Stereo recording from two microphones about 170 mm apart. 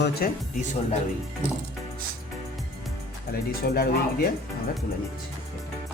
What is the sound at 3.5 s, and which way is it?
Speech, 65° left (ahead or behind).